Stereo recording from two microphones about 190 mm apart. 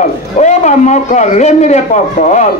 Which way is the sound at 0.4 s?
40° left (ahead or behind).